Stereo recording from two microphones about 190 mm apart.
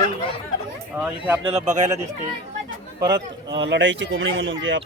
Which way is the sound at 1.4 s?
35° right (ahead or behind).